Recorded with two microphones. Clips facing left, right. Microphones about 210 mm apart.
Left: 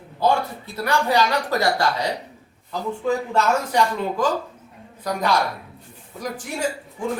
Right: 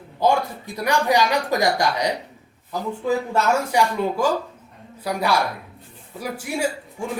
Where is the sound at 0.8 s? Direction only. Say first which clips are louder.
Right 1 dB; 15° right (ahead or behind).